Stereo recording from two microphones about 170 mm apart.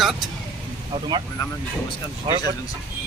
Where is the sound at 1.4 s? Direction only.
25° left (ahead or behind).